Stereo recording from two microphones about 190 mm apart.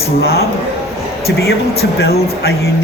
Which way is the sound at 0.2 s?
55° left (ahead or behind).